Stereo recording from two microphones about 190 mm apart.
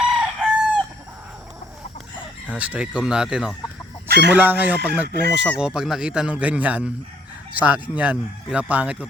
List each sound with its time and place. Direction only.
0.0 s chicken: 5° right (ahead or behind)
2.5 s speech: 5° right (ahead or behind)
4.1 s fowl: 65° right (ahead or behind)
4.4 s speech: 10° right (ahead or behind)
5.0 s speech: 60° right (ahead or behind)
5.4 s speech: 5° right (ahead or behind)